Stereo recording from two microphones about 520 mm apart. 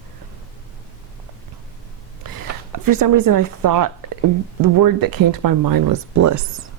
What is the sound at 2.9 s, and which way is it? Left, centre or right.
Speech, right.